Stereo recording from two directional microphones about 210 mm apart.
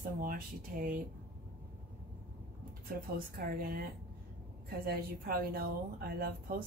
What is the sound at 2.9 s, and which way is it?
A woman's voice, 45° right (ahead or behind).